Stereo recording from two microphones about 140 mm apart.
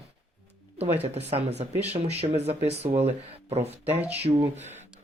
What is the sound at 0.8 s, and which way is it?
Speech, 45° right (ahead or behind).